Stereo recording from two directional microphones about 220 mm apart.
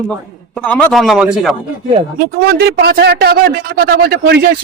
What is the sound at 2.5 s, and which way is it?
Speech, 45° right (ahead or behind).